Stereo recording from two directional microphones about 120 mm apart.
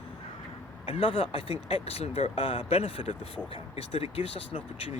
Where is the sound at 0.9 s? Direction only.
50° left (ahead or behind).